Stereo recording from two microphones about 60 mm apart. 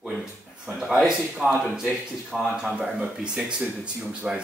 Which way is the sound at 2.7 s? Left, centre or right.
Centre.